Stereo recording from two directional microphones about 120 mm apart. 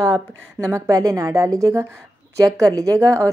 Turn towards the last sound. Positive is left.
turn(degrees=-30)  # may be behind; listen again after turning